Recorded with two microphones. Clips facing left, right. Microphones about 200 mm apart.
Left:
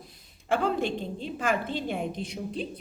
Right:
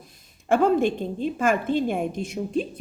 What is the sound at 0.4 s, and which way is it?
A woman's voice, 50° right (ahead or behind).